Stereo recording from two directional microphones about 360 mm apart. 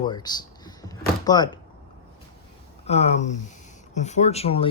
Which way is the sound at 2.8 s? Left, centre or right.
Centre.